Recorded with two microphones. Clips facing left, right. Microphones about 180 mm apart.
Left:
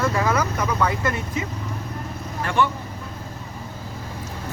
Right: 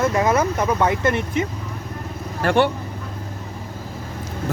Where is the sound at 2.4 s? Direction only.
65° right (ahead or behind).